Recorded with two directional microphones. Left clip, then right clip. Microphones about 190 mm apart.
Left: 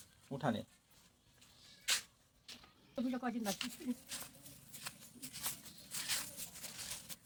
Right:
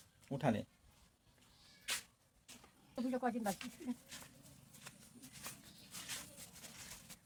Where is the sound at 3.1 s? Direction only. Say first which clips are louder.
Right 3 dB; 15° right (ahead or behind).